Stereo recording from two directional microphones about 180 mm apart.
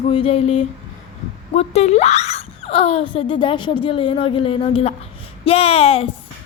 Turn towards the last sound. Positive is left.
turn(degrees=35)  # may be behind; listen again after turning